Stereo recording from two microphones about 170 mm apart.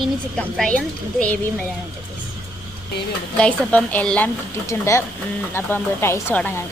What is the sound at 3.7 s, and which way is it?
Speech, 5° left (ahead or behind).